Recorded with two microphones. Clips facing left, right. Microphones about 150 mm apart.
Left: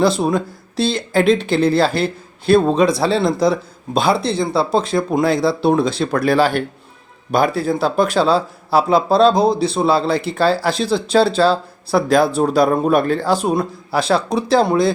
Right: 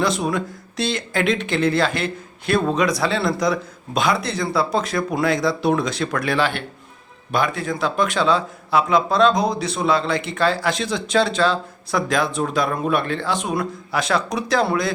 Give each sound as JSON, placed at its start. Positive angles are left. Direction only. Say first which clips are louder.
{"t": 0.0, "sound": "speech", "louder": "left 5 dB", "side_deg": 30}